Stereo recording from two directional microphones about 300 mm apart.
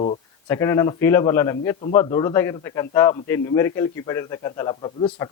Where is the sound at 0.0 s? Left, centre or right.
Left.